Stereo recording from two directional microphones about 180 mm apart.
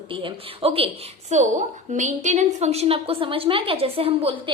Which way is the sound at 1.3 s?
40° right (ahead or behind).